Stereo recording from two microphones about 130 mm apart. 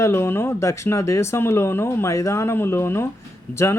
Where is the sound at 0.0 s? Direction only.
20° left (ahead or behind).